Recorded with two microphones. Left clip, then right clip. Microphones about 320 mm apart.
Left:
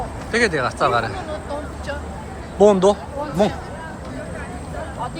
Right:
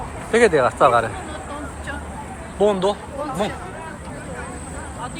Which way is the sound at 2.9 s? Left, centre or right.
Centre.